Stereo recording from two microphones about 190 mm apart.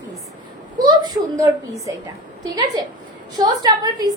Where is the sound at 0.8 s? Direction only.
20° right (ahead or behind).